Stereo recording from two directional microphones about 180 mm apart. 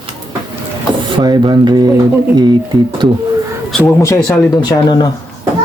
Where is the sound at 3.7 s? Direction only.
5° left (ahead or behind).